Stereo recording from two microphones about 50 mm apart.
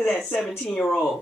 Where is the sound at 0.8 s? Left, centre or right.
Centre.